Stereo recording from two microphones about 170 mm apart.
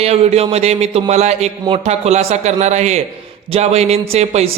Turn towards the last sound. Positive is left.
turn(degrees=-35)  # may be behind; listen again after turning